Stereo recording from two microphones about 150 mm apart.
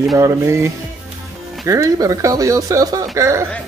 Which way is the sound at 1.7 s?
20° right (ahead or behind).